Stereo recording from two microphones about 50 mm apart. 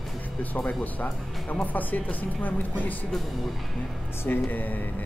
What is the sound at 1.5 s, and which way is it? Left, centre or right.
Speech, left.